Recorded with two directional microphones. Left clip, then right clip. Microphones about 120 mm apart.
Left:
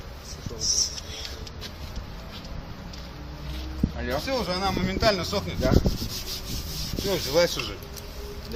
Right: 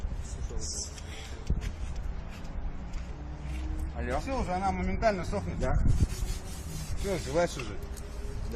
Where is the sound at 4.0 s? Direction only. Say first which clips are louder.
Left 3 dB; 35° right (ahead or behind).